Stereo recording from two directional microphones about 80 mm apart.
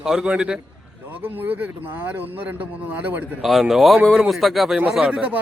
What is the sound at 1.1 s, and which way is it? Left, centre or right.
Speech, right.